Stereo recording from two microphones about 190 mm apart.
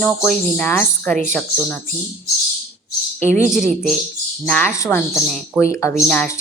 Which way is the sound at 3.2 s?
40° right (ahead or behind).